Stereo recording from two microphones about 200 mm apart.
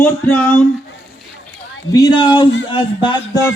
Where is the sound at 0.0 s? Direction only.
10° left (ahead or behind).